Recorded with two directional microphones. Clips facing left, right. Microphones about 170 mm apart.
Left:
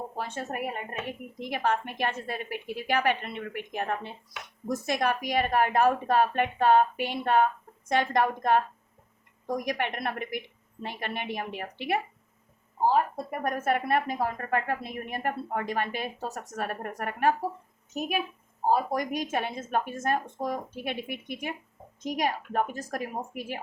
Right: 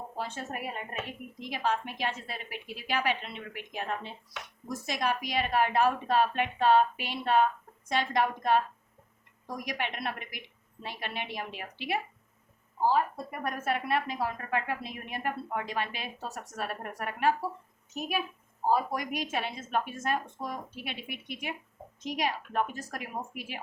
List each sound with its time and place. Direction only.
0.2 s a woman's voice: 55° left (ahead or behind)
13.4 s a woman's voice: 50° left (ahead or behind)
18.7 s a woman's voice: 45° left (ahead or behind)